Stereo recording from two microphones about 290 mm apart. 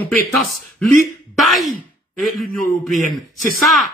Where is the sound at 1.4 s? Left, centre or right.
Centre.